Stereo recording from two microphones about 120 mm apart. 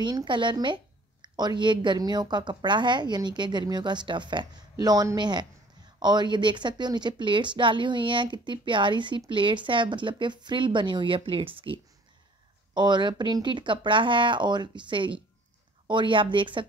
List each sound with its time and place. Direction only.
0.0 s a woman's voice: 40° right (ahead or behind)